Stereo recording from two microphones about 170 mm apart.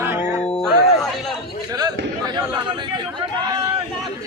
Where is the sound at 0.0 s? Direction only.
15° right (ahead or behind).